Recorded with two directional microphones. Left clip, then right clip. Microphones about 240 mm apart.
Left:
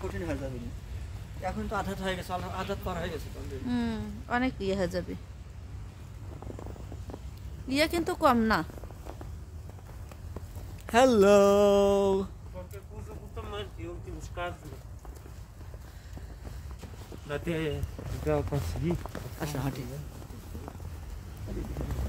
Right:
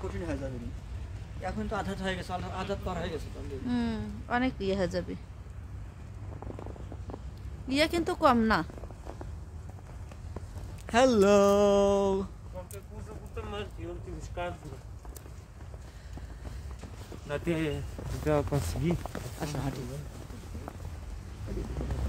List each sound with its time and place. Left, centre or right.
0.0 s speech: left
1.4 s speech: centre
3.6 s speech: centre
7.6 s speech: centre
10.9 s speech: centre
17.3 s speech: centre
18.3 s speech: right
18.8 s speech: right
19.4 s speech: left